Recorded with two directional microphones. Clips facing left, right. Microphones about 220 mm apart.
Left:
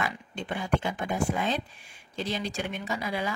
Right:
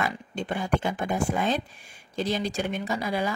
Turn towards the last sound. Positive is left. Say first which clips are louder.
# right 4 dB
turn(degrees=-40)  # may be behind; listen again after turning